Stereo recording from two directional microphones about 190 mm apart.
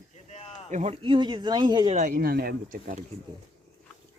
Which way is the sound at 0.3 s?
35° left (ahead or behind).